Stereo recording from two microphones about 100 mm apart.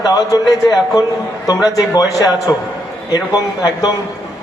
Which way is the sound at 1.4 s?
40° left (ahead or behind).